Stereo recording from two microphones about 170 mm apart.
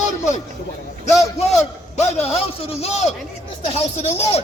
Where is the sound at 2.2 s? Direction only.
35° left (ahead or behind).